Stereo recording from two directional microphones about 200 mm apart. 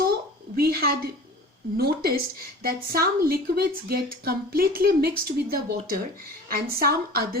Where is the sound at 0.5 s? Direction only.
50° right (ahead or behind).